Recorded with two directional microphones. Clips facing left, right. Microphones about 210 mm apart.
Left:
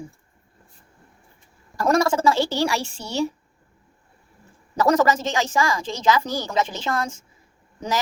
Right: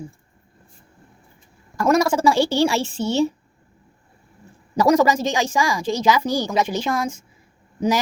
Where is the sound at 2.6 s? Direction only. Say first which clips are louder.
Right 5 dB; 20° right (ahead or behind).